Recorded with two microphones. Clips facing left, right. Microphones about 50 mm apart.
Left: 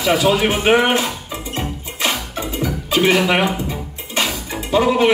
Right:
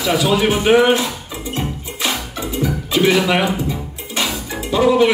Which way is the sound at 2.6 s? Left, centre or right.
Left.